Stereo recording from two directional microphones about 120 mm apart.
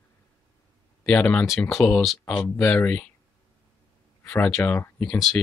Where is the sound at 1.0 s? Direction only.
10° left (ahead or behind).